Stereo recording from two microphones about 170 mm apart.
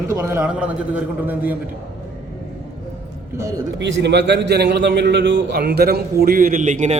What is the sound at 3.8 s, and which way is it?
A man's voice, 90° right.